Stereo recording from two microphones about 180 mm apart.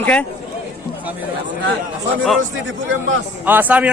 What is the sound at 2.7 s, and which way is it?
Speech, 90° right.